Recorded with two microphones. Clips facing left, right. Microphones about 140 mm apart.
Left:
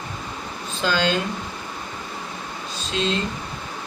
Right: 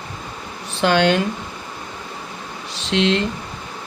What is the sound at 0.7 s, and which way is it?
Speech, 65° right (ahead or behind).